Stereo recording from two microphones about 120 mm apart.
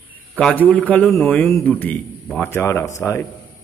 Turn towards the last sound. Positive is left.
turn(degrees=25)  # may be behind; listen again after turning